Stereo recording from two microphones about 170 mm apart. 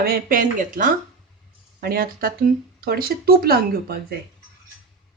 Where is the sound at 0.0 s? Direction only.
60° right (ahead or behind).